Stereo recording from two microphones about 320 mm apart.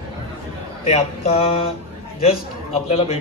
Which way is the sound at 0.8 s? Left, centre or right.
Centre.